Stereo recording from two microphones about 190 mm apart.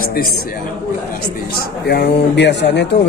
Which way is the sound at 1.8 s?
60° left (ahead or behind).